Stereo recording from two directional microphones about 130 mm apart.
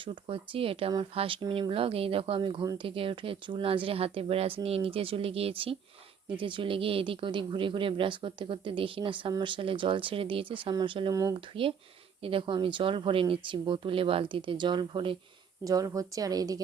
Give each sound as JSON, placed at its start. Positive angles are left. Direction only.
{"t": 0.0, "sound": "speech", "side_deg": -45}
{"t": 11.1, "sound": "a woman's voice", "side_deg": -25}
{"t": 11.6, "sound": "speech", "side_deg": -45}
{"t": 15.6, "sound": "a woman's voice", "side_deg": -25}